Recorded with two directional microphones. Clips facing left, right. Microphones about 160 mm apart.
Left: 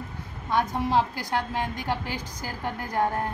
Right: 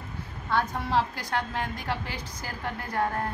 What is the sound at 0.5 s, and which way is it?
Speech, 15° left (ahead or behind).